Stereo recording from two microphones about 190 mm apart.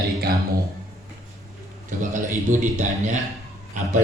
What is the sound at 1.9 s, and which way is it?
A man's voice, 40° right (ahead or behind).